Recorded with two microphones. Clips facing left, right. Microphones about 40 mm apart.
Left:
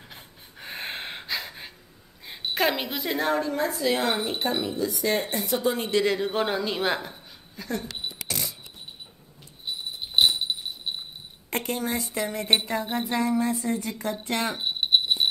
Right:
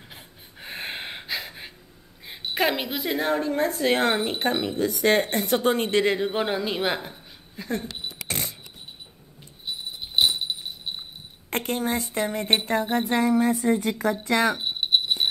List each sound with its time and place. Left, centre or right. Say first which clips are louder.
0.1 s gasp: even; centre
2.2 s a woman's voice: right 1 dB; centre
3.4 s speech: right 2 dB; right
6.1 s a woman's voice: right 1 dB; centre
8.3 s a sound: right 4 dB; right
11.5 s speech: right 2 dB; right
13.7 s speech: right 6 dB; right
14.2 s speech: right 6 dB; right
14.5 s jingle bell: even; centre